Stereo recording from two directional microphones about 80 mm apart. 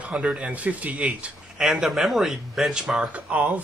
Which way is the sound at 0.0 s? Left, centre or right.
Centre.